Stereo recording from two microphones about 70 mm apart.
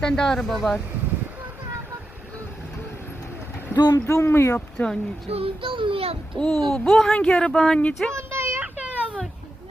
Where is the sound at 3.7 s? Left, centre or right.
Left.